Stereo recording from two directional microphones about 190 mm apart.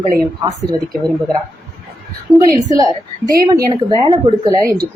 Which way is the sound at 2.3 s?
5° right (ahead or behind).